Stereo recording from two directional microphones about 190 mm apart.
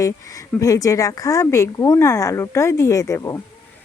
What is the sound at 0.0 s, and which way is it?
Speech, 15° left (ahead or behind).